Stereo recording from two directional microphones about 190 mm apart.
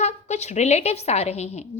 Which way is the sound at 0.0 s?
35° left (ahead or behind).